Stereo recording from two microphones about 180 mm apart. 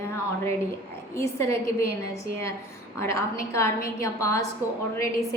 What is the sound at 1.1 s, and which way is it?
Speech, 15° left (ahead or behind).